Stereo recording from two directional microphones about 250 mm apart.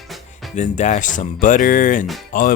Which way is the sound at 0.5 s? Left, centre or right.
Left.